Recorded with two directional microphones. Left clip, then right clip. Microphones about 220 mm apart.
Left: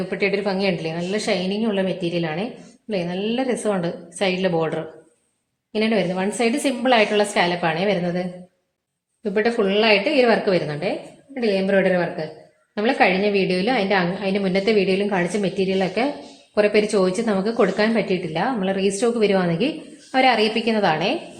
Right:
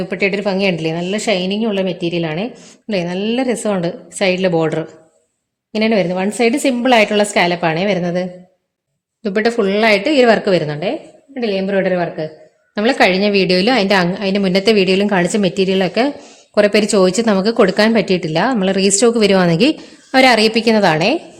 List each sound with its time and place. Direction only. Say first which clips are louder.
0.1 s a woman's voice: right 5 dB; 50° right (ahead or behind)
9.2 s a woman's voice: right 4 dB; 50° right (ahead or behind)
11.3 s a woman's voice: right 2 dB; 35° right (ahead or behind)
12.7 s a woman's voice: right 5 dB; 50° right (ahead or behind)